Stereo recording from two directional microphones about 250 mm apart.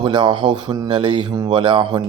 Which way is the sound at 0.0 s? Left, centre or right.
Centre.